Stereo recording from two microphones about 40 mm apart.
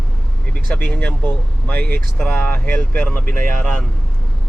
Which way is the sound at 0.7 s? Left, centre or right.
Left.